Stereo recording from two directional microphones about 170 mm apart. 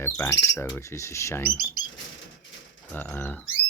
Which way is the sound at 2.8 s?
10° left (ahead or behind).